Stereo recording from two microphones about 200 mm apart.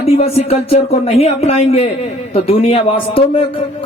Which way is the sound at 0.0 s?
30° left (ahead or behind).